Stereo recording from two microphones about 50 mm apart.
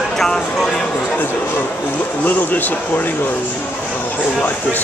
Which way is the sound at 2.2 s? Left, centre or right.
Left.